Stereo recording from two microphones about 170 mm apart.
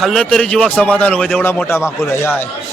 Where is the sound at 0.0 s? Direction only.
Centre (ahead or behind).